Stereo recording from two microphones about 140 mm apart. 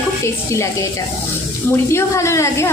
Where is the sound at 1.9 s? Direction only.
20° left (ahead or behind).